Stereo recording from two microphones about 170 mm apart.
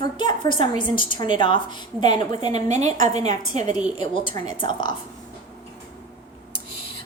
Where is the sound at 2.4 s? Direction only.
40° right (ahead or behind).